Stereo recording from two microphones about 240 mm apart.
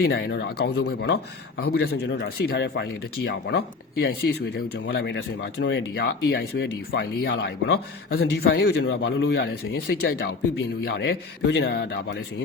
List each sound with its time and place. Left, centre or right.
0.0 s speech: left